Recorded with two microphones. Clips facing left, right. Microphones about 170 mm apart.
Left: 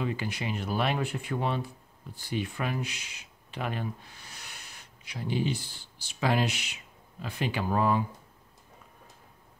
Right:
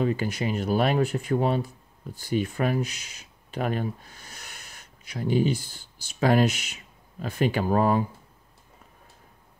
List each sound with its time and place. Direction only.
0.0 s speech: 40° right (ahead or behind)